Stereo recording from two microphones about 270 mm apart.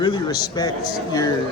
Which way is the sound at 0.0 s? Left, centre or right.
Centre.